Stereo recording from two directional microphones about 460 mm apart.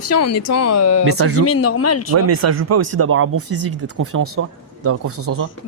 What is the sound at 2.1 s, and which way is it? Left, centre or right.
Speech, right.